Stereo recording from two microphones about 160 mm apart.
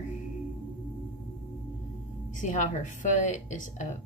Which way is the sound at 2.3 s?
50° left (ahead or behind).